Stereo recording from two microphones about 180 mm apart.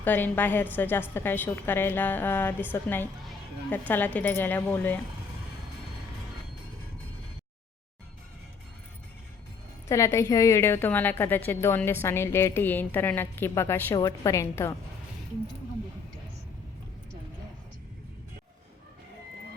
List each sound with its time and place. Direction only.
0.0 s a woman's voice: 10° left (ahead or behind)
9.9 s a woman's voice: 15° left (ahead or behind)